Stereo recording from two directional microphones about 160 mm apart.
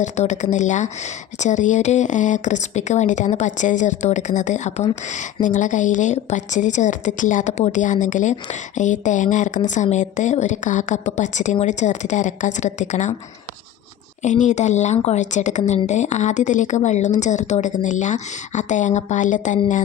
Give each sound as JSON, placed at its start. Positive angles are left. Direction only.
{"t": 0.0, "sound": "a woman's voice", "side_deg": 45}
{"t": 14.2, "sound": "a woman's voice", "side_deg": 50}